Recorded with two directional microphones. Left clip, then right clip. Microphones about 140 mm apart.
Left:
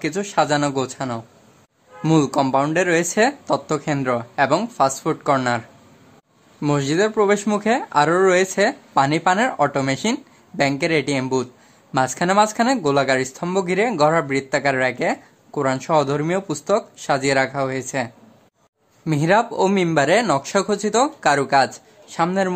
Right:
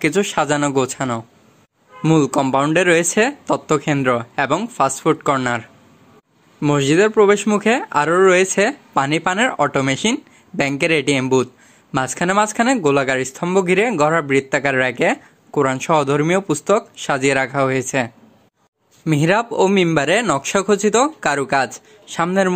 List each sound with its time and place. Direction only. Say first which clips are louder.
0.0 s speech: right 3 dB; 35° right (ahead or behind)
2.0 s speech: right 2 dB; 15° right (ahead or behind)